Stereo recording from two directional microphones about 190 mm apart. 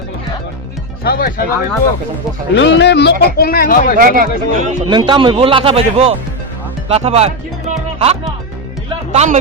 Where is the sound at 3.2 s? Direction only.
55° left (ahead or behind).